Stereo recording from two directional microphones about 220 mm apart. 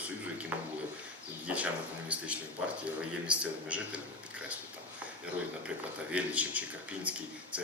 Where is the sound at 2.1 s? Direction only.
5° right (ahead or behind).